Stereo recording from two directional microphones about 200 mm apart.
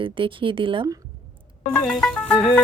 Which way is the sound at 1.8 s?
5° left (ahead or behind).